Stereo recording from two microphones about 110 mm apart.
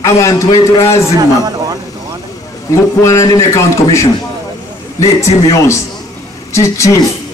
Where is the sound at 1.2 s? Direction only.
35° right (ahead or behind).